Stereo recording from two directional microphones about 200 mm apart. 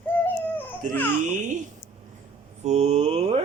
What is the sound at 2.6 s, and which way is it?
Speech, 35° right (ahead or behind).